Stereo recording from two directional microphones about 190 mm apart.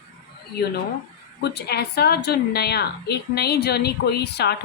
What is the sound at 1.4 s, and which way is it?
A woman's voice, 60° left (ahead or behind).